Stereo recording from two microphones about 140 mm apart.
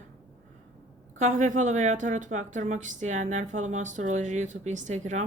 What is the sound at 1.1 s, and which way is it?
A woman's voice, 60° right (ahead or behind).